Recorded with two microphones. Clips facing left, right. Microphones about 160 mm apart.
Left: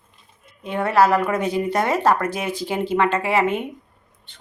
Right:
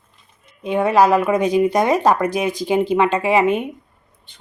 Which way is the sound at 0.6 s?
15° right (ahead or behind).